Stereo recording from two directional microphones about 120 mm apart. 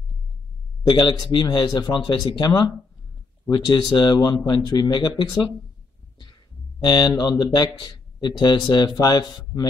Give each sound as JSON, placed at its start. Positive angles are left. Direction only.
{"t": 0.8, "sound": "speech", "side_deg": 40}
{"t": 6.8, "sound": "speech", "side_deg": 35}